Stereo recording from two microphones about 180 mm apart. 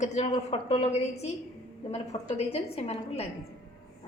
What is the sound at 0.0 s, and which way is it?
A woman's voice, 40° left (ahead or behind).